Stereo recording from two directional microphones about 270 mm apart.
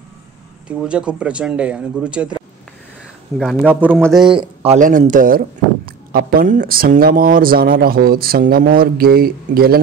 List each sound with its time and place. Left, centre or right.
0.7 s speech: centre
3.3 s speech: centre
4.3 s speech: right